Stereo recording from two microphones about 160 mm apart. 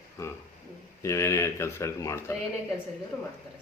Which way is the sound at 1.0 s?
15° left (ahead or behind).